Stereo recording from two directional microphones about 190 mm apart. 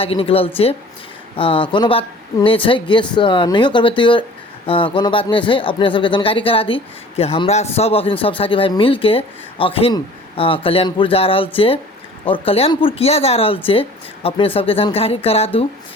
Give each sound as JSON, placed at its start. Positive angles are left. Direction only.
{"t": 0.0, "sound": "speech", "side_deg": 30}